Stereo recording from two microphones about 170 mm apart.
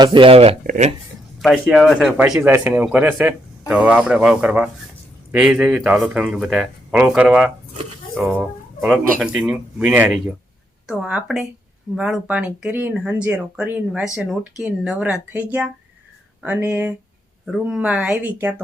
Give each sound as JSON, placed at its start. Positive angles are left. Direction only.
{"t": 0.0, "sound": "speech", "side_deg": -30}
{"t": 0.6, "sound": "speech", "side_deg": -45}
{"t": 1.4, "sound": "speech", "side_deg": 0}